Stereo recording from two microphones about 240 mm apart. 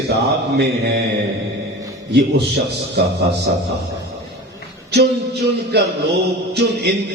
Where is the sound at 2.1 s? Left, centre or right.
Right.